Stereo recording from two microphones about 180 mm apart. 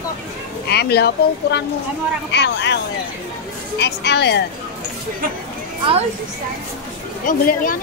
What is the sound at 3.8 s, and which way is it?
Speech, 65° left (ahead or behind).